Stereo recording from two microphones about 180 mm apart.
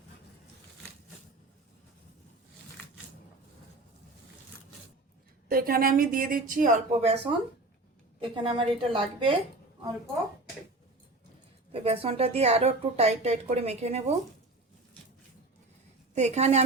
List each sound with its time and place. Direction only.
5.5 s a woman's voice: 55° right (ahead or behind)
7.0 s a woman's voice: 35° right (ahead or behind)
11.7 s speech: 30° right (ahead or behind)
16.1 s speech: 40° right (ahead or behind)